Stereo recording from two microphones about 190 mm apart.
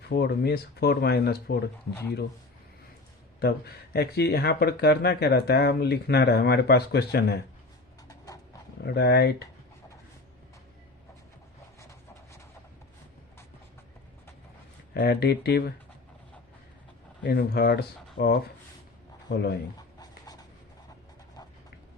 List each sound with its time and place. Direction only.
0.0 s speech: 60° left (ahead or behind)
3.4 s speech: 55° left (ahead or behind)
8.0 s a sound: 20° left (ahead or behind)
8.8 s speech: 60° left (ahead or behind)
11.8 s a sound: 15° left (ahead or behind)
14.9 s speech: 60° left (ahead or behind)
17.2 s speech: 60° left (ahead or behind)
20.0 s writing: 20° left (ahead or behind)